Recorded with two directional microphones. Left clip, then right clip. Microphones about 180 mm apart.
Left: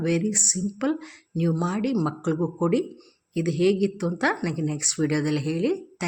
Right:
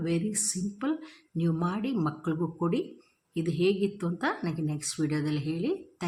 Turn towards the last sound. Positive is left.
turn(degrees=20)  # may be behind; listen again after turning